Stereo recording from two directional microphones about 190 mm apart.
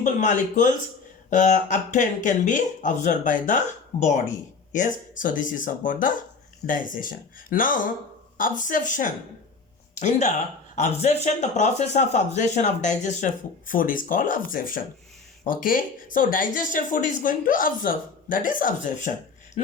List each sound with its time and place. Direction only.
0.0 s speech: 40° left (ahead or behind)